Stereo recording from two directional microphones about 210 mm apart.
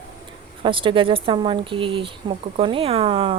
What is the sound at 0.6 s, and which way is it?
Speech, 25° right (ahead or behind).